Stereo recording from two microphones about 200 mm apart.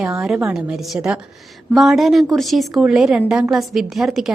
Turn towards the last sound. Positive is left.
turn(degrees=0)  # may be behind; listen again after turning